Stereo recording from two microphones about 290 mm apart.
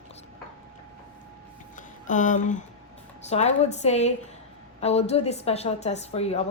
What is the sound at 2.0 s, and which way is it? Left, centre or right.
A woman's voice, left.